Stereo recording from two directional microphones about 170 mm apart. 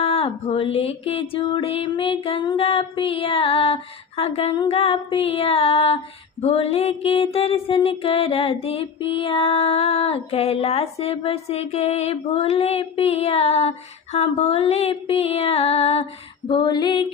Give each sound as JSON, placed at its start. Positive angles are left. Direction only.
{"t": 0.0, "sound": "music", "side_deg": 35}